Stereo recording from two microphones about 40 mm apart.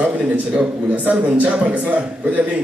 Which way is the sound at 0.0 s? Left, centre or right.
Right.